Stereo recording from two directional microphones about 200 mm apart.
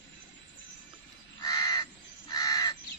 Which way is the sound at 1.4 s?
15° left (ahead or behind).